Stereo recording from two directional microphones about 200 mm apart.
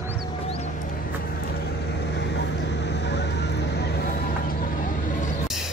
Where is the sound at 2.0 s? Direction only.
60° left (ahead or behind).